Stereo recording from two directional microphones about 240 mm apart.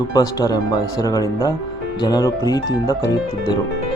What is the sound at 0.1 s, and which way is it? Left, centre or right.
Speech, centre.